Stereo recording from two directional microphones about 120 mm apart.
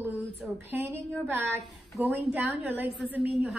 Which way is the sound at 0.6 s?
15° right (ahead or behind).